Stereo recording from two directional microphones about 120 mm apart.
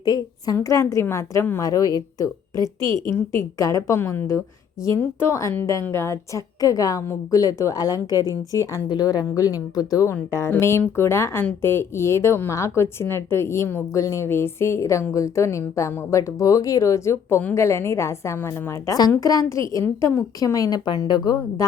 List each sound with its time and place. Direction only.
0.0 s a woman's voice: 35° left (ahead or behind)